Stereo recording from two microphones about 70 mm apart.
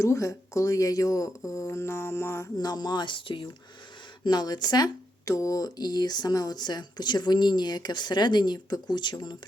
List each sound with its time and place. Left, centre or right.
0.0 s speech: left
2.6 s speech: left
4.2 s speech: left
5.2 s speech: left